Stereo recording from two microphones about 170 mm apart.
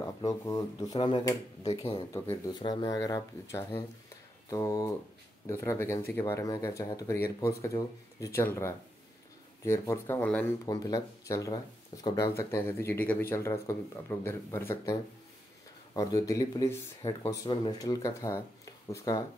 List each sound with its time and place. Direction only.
0.0 s speech: 20° left (ahead or behind)
4.5 s speech: 20° left (ahead or behind)
9.7 s speech: 15° left (ahead or behind)
10.6 s speech: 20° left (ahead or behind)